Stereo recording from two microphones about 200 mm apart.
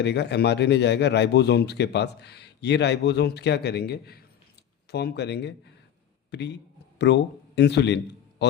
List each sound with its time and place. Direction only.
0.0 s speech: 60° left (ahead or behind)